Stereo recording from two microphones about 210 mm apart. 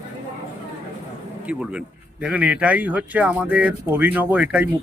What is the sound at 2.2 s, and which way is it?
Speech, 5° right (ahead or behind).